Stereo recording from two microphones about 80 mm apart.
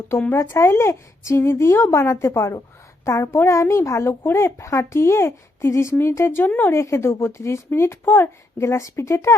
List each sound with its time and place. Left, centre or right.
0.3 s speech: left